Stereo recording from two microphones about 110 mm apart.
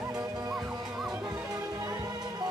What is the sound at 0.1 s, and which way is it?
Music, 35° right (ahead or behind).